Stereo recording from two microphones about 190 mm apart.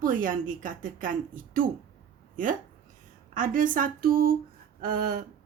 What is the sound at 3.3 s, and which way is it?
Speech, 45° right (ahead or behind).